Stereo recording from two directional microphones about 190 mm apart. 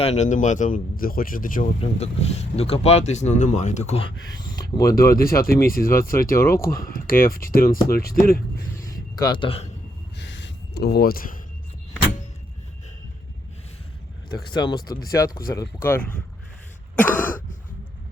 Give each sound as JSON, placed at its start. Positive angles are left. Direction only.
{"t": 0.0, "sound": "speech", "side_deg": 35}
{"t": 1.8, "sound": "speech", "side_deg": 35}
{"t": 4.7, "sound": "speech", "side_deg": 15}
{"t": 5.1, "sound": "speech", "side_deg": 50}
{"t": 6.3, "sound": "speech", "side_deg": 15}
{"t": 6.9, "sound": "speech", "side_deg": 50}
{"t": 8.8, "sound": "a sound", "side_deg": 20}
{"t": 10.2, "sound": "a sound", "side_deg": 70}
{"t": 14.3, "sound": "speech", "side_deg": 20}
{"t": 15.5, "sound": "speech", "side_deg": 10}
{"t": 16.9, "sound": "throat clearing", "side_deg": 10}